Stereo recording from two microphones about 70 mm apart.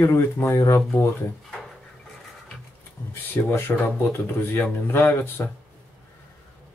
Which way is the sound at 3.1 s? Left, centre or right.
Left.